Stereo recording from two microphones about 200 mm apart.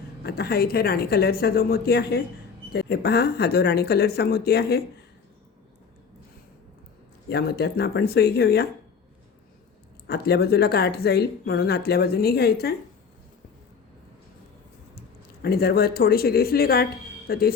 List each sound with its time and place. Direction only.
0.2 s speech: 50° left (ahead or behind)
7.3 s speech: 50° left (ahead or behind)
10.1 s speech: 55° left (ahead or behind)
15.4 s speech: 50° left (ahead or behind)